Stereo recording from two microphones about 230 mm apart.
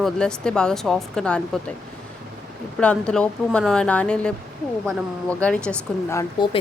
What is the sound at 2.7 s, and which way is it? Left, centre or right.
Speech, centre.